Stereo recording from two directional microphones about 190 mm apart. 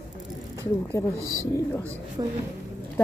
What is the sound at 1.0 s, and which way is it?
Speech, 15° left (ahead or behind).